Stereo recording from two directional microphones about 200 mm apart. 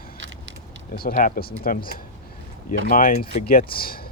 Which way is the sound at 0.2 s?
65° right (ahead or behind).